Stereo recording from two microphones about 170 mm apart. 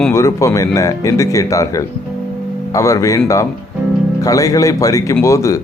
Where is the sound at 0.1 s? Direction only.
20° left (ahead or behind).